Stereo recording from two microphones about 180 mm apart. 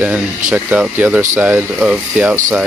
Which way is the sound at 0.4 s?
45° right (ahead or behind).